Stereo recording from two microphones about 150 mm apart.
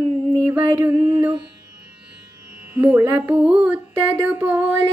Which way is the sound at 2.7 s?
15° right (ahead or behind).